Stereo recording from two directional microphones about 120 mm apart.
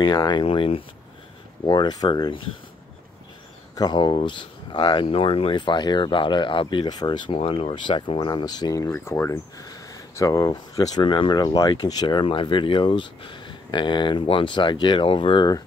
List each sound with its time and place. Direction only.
0.0 s speech: 35° left (ahead or behind)
1.7 s speech: 35° left (ahead or behind)
3.7 s speech: 35° left (ahead or behind)
7.3 s speech: 50° left (ahead or behind); by 8.9 s 30° left (ahead or behind)
8.9 s speech: 20° left (ahead or behind); by 15.6 s 35° left (ahead or behind)